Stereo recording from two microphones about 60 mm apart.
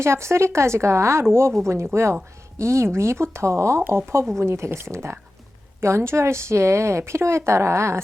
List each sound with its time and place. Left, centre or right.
0.0 s speech: right